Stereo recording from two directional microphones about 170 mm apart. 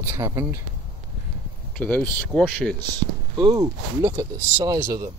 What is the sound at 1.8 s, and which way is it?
Speech, 10° left (ahead or behind).